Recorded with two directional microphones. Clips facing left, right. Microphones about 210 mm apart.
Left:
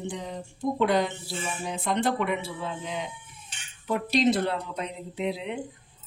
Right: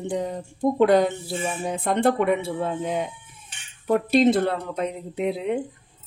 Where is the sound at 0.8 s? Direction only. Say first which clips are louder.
Right 7 dB; 50° right (ahead or behind).